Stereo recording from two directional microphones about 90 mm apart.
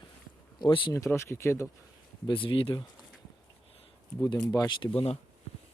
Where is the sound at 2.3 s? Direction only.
70° left (ahead or behind).